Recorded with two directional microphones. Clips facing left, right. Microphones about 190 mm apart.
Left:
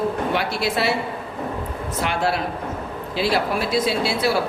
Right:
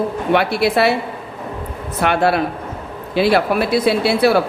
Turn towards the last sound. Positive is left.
turn(degrees=-60)  # may be behind; listen again after turning